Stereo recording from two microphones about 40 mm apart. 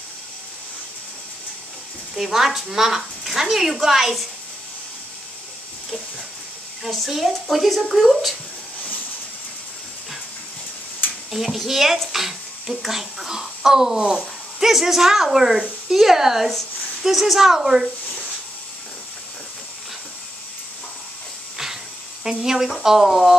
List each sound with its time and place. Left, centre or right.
2.1 s a woman's voice: centre
6.9 s a woman's voice: centre
11.0 s a sound: left
11.3 s a woman's voice: centre
22.4 s a woman's voice: centre